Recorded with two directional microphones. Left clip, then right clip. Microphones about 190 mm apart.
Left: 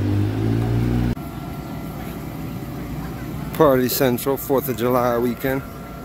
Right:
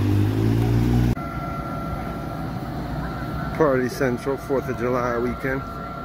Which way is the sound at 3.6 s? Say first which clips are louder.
Left 4 dB; 30° left (ahead or behind).